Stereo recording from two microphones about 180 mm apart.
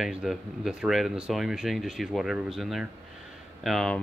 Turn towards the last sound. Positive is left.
turn(degrees=0)  # may be behind; listen again after turning